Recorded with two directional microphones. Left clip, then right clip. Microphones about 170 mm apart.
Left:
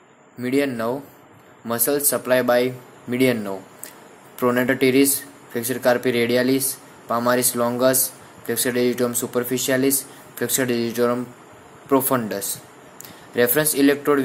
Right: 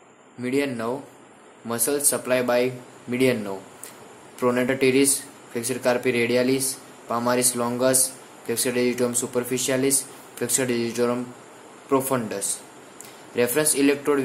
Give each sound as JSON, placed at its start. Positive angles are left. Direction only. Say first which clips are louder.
{"t": 0.4, "sound": "speech", "louder": "left 3 dB", "side_deg": 15}